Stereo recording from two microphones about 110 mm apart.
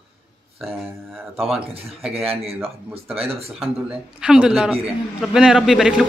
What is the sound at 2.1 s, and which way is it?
Speech, 65° right (ahead or behind).